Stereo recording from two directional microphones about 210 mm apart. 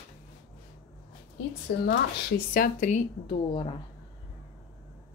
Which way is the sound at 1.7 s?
50° left (ahead or behind).